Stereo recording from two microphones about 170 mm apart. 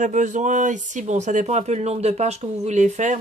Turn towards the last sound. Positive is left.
turn(degrees=-45)  # may be behind; listen again after turning